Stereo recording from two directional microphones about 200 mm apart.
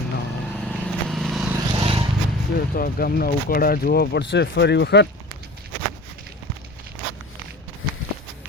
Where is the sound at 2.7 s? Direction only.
45° left (ahead or behind).